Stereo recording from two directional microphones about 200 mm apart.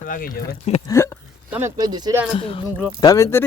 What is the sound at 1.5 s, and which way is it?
Speech, 10° right (ahead or behind).